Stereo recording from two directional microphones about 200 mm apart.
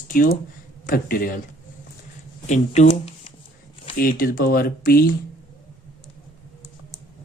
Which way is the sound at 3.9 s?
45° left (ahead or behind).